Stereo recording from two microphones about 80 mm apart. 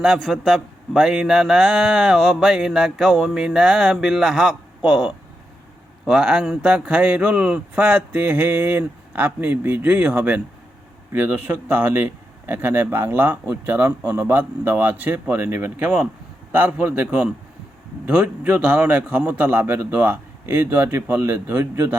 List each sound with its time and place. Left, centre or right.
0.2 s a man's voice: centre
6.1 s speech: centre; by 21.9 s right